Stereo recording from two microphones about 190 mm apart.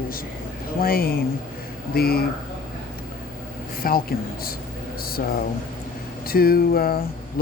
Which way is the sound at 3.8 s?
50° left (ahead or behind).